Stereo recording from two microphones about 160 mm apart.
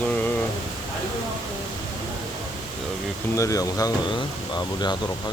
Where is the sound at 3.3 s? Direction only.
20° left (ahead or behind).